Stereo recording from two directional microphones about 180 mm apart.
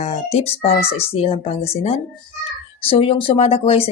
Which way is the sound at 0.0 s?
35° left (ahead or behind).